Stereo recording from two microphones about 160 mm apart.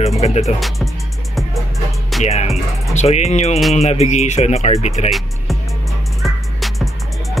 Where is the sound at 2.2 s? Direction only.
40° left (ahead or behind).